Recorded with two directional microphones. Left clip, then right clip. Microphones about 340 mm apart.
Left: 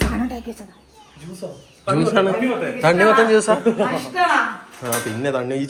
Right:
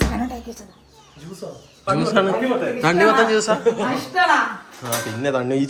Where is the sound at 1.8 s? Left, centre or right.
Centre.